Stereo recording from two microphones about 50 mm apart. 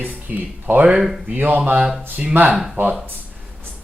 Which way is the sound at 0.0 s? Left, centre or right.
Right.